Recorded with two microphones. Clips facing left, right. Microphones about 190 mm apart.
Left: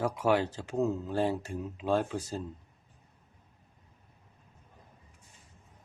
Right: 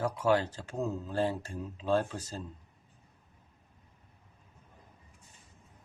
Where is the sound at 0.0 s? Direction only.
15° left (ahead or behind).